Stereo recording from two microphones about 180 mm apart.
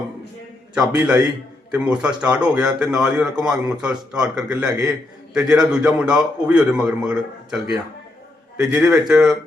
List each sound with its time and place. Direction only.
0.7 s a man's voice: 5° right (ahead or behind)